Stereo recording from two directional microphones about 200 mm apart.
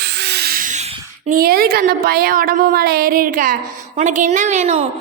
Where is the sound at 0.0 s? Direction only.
55° right (ahead or behind); by 1.3 s 30° right (ahead or behind).